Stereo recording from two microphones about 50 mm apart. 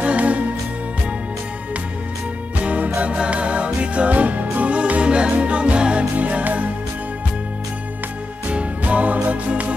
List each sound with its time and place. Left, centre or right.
0.0 s music: right
2.6 s music: right
8.5 s music: right